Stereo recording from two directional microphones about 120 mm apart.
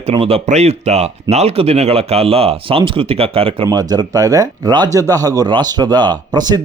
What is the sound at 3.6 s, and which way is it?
Speech, 35° right (ahead or behind).